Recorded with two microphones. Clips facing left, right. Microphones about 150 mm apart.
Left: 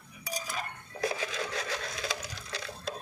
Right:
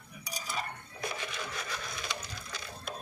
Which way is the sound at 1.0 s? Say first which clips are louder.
Left 6 dB; 90° left.